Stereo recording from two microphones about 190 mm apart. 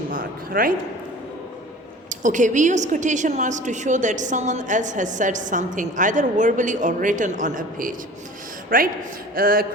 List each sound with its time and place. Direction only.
0.1 s speech: 50° right (ahead or behind)
2.0 s a woman's voice: 40° right (ahead or behind)